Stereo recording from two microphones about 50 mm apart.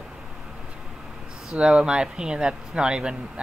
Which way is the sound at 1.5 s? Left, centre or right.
Centre.